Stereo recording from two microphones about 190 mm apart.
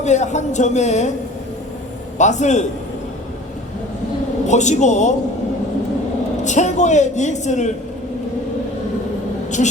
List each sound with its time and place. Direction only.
0.0 s a woman's voice: 40° left (ahead or behind)
2.1 s a woman's voice: 40° left (ahead or behind)
4.4 s a woman's voice: 40° left (ahead or behind)
6.4 s a woman's voice: 40° left (ahead or behind)
9.6 s a woman's voice: 40° left (ahead or behind)